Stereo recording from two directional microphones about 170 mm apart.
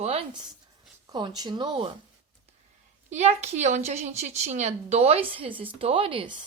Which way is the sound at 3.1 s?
40° right (ahead or behind).